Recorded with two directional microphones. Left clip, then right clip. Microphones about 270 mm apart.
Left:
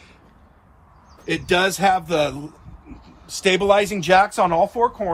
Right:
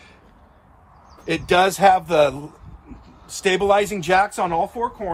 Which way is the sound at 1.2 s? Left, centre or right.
Right.